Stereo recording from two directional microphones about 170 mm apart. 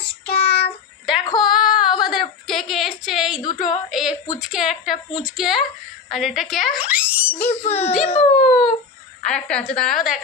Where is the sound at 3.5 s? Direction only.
45° left (ahead or behind).